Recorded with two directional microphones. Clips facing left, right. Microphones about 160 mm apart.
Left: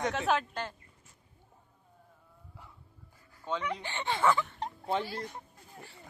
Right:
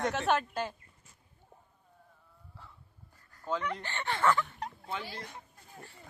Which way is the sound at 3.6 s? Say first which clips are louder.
Left 1 dB; 10° left (ahead or behind).